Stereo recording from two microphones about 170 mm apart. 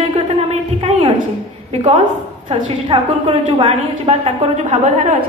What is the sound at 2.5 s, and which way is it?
A woman's voice, 30° right (ahead or behind).